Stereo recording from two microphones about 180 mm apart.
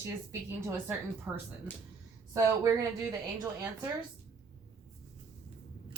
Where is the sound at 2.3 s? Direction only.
20° right (ahead or behind).